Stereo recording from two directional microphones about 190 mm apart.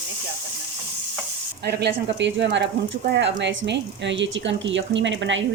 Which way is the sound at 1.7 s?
60° right (ahead or behind).